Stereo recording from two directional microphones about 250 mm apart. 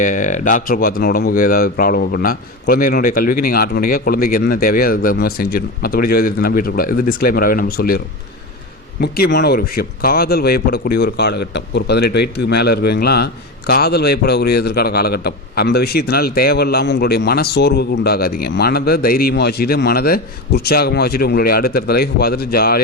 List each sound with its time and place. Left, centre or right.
0.0 s a man's voice: left